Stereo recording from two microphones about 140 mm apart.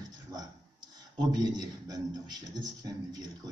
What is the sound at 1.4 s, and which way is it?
Speech, 30° right (ahead or behind).